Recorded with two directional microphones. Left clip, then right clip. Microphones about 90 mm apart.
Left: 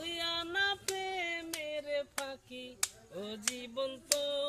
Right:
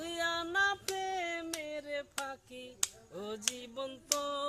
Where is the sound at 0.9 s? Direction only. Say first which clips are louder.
Right 1 dB; 35° right (ahead or behind).